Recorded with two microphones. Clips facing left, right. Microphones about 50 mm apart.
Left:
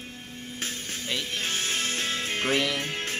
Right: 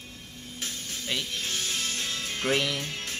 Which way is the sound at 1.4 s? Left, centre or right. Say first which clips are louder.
Left 3 dB; left.